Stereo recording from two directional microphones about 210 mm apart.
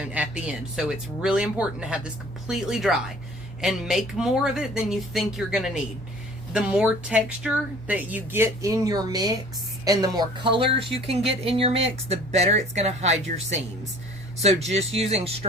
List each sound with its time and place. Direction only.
0.0 s speech: 5° right (ahead or behind); by 15.4 s 30° right (ahead or behind)